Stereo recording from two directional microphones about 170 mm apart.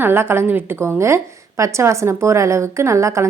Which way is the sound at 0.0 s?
15° right (ahead or behind).